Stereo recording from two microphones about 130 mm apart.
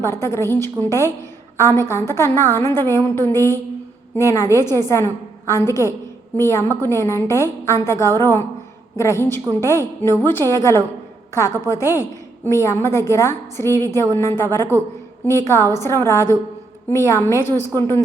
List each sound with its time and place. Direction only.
0.0 s a woman's voice: 20° left (ahead or behind)